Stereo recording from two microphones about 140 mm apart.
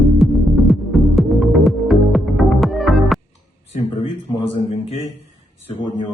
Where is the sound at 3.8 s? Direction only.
40° left (ahead or behind).